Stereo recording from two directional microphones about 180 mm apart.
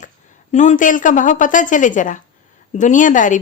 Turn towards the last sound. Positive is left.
turn(degrees=45)  # may be behind; listen again after turning